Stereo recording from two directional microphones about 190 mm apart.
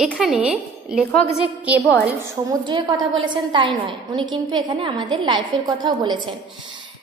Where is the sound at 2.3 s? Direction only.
20° right (ahead or behind).